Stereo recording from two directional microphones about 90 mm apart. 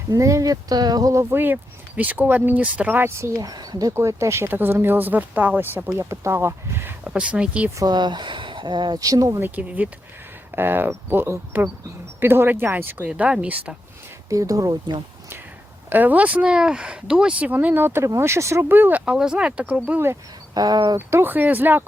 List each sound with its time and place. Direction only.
0.1 s speech: 35° right (ahead or behind)
2.0 s speech: 20° right (ahead or behind)
3.3 s speech: 45° right (ahead or behind)
3.9 s speech: 30° right (ahead or behind)
7.1 s speech: 10° right (ahead or behind)
7.8 s speech: 50° right (ahead or behind)
9.4 s speech: 20° right (ahead or behind)
14.3 s speech: 35° right (ahead or behind)
15.9 s speech: 20° right (ahead or behind)
19.9 s speech: 25° right (ahead or behind)
20.5 s speech: 50° right (ahead or behind)
21.1 s speech: 25° right (ahead or behind)